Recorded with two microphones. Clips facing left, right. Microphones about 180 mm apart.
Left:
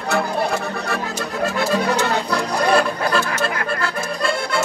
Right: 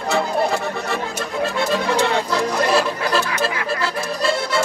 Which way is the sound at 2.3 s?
5° right (ahead or behind).